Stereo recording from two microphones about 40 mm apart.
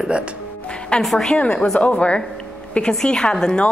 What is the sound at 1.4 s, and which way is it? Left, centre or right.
Speech, left.